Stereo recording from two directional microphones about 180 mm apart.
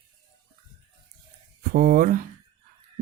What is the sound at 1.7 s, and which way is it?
Speech, 55° right (ahead or behind).